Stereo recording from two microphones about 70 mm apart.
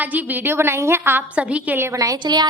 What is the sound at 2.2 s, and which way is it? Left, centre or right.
Speech, right.